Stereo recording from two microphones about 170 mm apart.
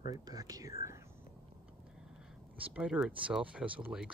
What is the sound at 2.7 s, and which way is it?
Speech, 5° right (ahead or behind).